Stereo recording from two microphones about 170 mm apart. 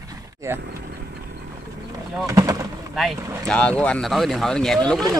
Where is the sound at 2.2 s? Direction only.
20° right (ahead or behind).